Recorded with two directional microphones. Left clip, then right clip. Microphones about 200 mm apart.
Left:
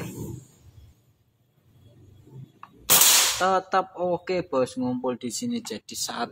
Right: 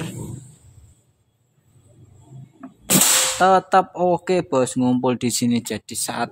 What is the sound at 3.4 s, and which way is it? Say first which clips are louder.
Speech: right 8 dB; 40° right (ahead or behind).